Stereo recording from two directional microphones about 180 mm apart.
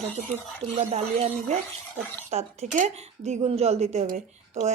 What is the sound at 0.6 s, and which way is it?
Speech, 40° right (ahead or behind).